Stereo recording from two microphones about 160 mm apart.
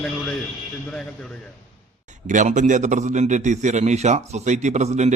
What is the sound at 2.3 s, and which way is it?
A man's voice, 50° right (ahead or behind).